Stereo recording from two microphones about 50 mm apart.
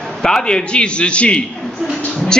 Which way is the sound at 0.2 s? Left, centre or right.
Centre.